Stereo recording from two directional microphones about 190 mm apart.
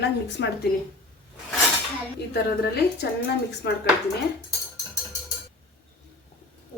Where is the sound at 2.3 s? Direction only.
60° left (ahead or behind).